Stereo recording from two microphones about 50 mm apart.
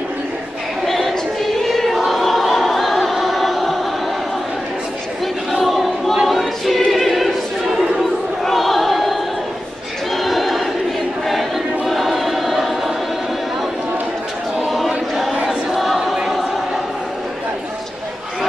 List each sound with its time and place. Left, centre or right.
0.8 s a sound: centre
1.6 s choir: centre
5.5 s choir: centre
7.7 s a sound: centre
11.2 s choir: centre
15.8 s choir: centre